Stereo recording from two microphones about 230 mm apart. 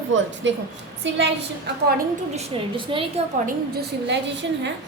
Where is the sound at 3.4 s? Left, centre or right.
Right.